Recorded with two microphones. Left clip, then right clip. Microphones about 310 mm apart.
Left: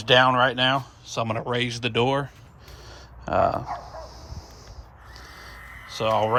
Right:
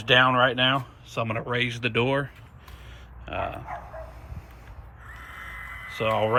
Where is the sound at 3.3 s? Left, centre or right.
Left.